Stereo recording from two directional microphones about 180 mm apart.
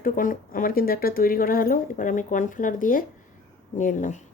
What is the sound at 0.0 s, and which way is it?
A woman's voice, 50° left (ahead or behind).